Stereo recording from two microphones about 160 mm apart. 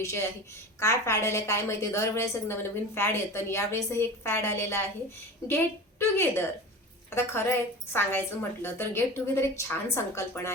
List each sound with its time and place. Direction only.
0.0 s a woman's voice: 20° left (ahead or behind)